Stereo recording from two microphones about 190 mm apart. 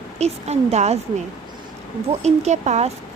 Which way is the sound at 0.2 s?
35° right (ahead or behind).